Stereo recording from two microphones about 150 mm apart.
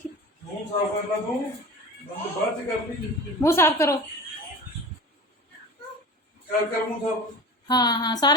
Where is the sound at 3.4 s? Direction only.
20° left (ahead or behind).